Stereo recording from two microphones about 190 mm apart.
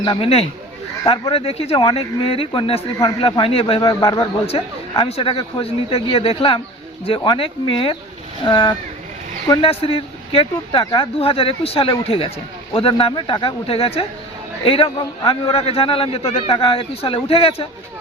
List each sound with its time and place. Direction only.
0.0 s speech: 25° left (ahead or behind)